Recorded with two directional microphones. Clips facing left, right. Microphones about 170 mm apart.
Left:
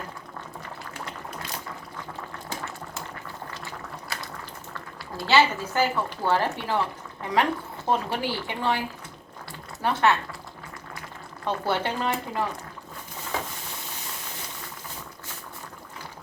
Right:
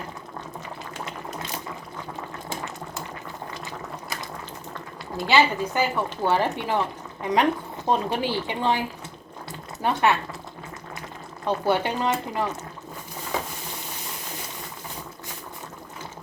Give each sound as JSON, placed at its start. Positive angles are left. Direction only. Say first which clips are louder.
{"t": 5.1, "sound": "speech", "louder": "right 1 dB", "side_deg": -15}
{"t": 9.5, "sound": "a sound", "louder": "right 2 dB", "side_deg": -15}
{"t": 11.4, "sound": "speech", "louder": "right 3 dB", "side_deg": -15}